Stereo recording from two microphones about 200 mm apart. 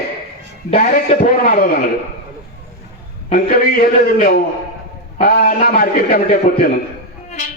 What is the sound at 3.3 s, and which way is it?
Speech, 50° left (ahead or behind).